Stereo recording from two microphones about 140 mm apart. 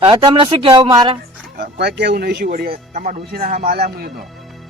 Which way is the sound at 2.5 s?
80° right.